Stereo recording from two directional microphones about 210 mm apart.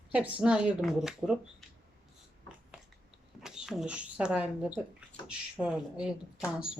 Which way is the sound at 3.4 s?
5° right (ahead or behind).